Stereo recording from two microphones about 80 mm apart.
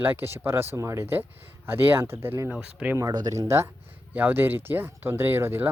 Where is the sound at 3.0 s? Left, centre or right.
Right.